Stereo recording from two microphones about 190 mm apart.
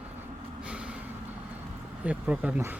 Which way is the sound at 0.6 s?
5° right (ahead or behind).